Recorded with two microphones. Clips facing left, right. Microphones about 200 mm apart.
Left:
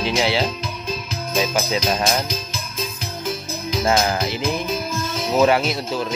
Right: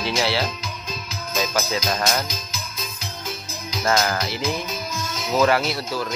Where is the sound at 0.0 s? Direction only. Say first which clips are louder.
Left 3 dB; 15° left (ahead or behind).